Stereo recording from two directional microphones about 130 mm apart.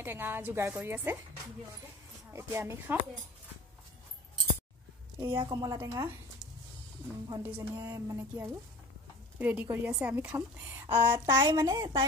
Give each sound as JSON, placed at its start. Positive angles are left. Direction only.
{"t": 0.0, "sound": "a woman's voice", "side_deg": -15}
{"t": 2.3, "sound": "a woman's voice", "side_deg": -20}
{"t": 5.2, "sound": "speech", "side_deg": -35}
{"t": 7.4, "sound": "a woman's voice", "side_deg": -15}
{"t": 11.3, "sound": "speech", "side_deg": -35}